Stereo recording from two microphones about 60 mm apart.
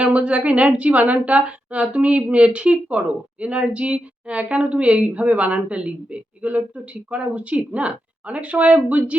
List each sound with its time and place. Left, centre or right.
0.0 s a woman's voice: right